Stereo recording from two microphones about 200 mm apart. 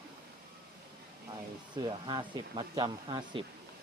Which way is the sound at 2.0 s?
25° right (ahead or behind).